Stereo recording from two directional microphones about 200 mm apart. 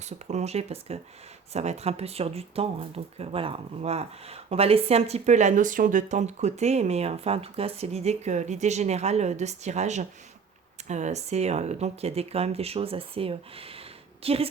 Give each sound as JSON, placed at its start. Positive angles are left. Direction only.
{"t": 0.0, "sound": "speech", "side_deg": -35}